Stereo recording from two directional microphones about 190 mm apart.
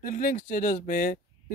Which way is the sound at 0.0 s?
45° left (ahead or behind).